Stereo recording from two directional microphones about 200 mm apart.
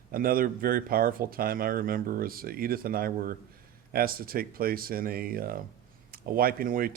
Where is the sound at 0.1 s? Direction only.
45° right (ahead or behind).